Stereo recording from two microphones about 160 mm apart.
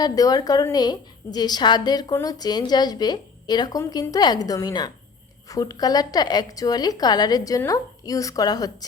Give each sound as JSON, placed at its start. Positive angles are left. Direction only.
{"t": 0.0, "sound": "a woman's voice", "side_deg": 25}